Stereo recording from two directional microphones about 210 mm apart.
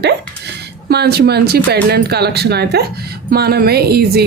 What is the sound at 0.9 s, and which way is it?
Speech, 50° right (ahead or behind).